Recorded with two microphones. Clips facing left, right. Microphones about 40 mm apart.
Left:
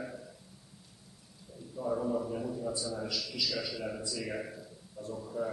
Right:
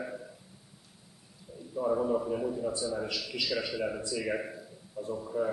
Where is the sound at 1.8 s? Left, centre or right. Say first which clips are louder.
Right 4 dB; right.